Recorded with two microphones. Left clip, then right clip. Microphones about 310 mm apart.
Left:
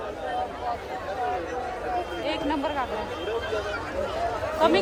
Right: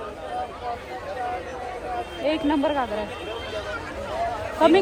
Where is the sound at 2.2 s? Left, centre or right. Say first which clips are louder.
Right 9 dB; right.